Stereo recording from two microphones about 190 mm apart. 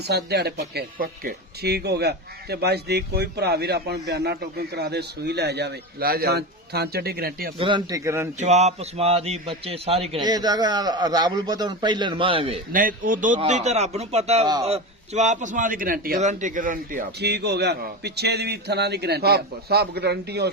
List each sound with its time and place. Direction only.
0.1 s speech: 60° right (ahead or behind)
7.6 s a man's voice: 25° right (ahead or behind)
8.4 s a man's voice: 35° right (ahead or behind)
12.7 s a man's voice: 45° right (ahead or behind)